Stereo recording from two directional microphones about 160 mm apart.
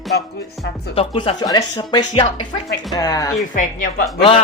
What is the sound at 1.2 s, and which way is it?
Speech, 30° left (ahead or behind).